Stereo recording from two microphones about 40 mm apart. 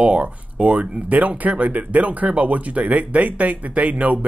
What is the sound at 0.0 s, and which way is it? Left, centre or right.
Speech, right.